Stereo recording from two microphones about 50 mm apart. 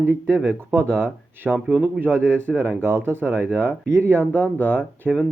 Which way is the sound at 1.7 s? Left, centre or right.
Right.